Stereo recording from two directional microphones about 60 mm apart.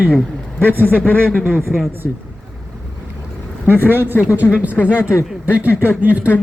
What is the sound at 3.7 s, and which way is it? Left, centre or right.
Speech, right.